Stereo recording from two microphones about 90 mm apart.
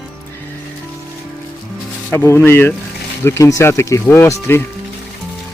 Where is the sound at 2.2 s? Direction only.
30° left (ahead or behind).